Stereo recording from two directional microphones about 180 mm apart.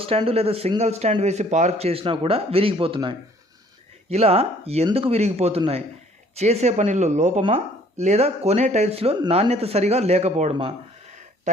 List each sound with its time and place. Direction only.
0.0 s speech: 30° right (ahead or behind)